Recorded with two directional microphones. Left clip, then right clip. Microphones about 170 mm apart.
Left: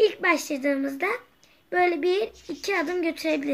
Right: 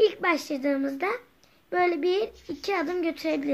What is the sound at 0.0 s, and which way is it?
A woman's voice, 20° left (ahead or behind).